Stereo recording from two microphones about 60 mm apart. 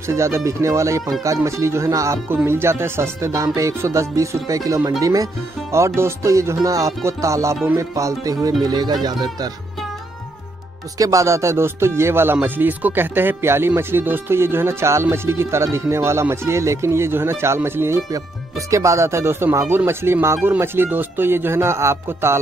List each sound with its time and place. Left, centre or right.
0.1 s music: right
2.4 s speech: right
3.3 s music: right
11.0 s speech: right
18.7 s speech: right